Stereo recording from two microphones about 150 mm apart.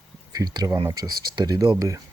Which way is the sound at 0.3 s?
25° right (ahead or behind).